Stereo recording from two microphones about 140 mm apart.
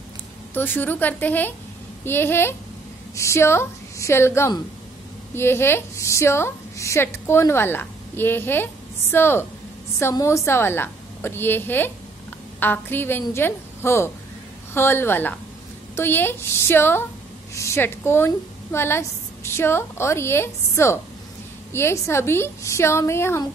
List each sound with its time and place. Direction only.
0.6 s a woman's voice: 15° left (ahead or behind)